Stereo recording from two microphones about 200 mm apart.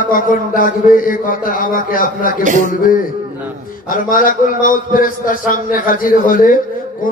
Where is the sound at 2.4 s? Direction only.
40° right (ahead or behind).